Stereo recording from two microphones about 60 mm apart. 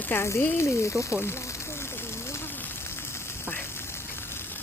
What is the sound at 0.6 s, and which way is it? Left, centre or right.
Speech, left.